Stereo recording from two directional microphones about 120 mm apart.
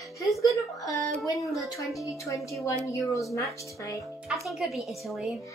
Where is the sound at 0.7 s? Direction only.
30° left (ahead or behind).